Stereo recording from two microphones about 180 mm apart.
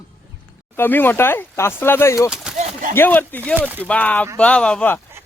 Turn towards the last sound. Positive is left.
turn(degrees=10)  # may be behind; listen again after turning